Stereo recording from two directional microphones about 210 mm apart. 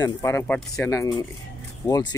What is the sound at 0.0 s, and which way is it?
Speech, 10° left (ahead or behind).